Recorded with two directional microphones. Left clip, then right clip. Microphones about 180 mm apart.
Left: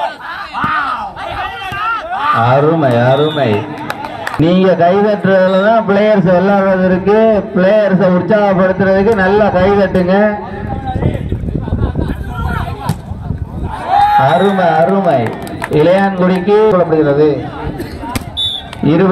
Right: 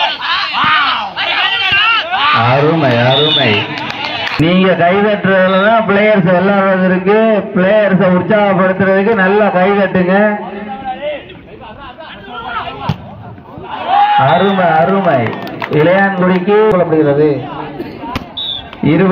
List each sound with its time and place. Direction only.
0.6 s a sound: 5° left (ahead or behind)
2.6 s a sound: 40° left (ahead or behind)
4.2 s speech: 70° left (ahead or behind)
5.6 s a man's voice: 50° left (ahead or behind)
6.2 s a man's voice: 90° left
7.3 s speech: 70° left (ahead or behind)
7.9 s a man's voice: 55° left (ahead or behind); by 8.7 s 80° left
8.7 s speech: 65° left (ahead or behind)
14.1 s a man's voice: 45° left (ahead or behind)
15.7 s a man's voice: 70° left (ahead or behind)